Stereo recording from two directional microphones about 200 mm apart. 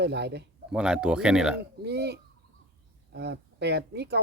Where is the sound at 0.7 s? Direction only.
5° right (ahead or behind).